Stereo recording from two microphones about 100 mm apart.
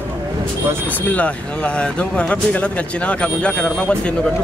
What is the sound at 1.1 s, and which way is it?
Speech, 15° left (ahead or behind).